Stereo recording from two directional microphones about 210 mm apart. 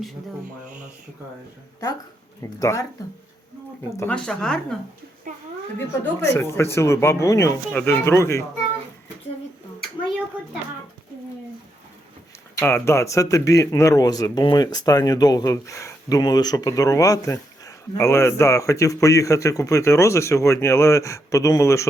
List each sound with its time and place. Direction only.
2.4 s speech: 15° left (ahead or behind)
3.8 s speech: 15° left (ahead or behind)
4.1 s a woman's voice: 5° left (ahead or behind)
5.3 s speech: 40° right (ahead or behind)
6.2 s speech: 10° left (ahead or behind)
12.5 s speech: 10° left (ahead or behind)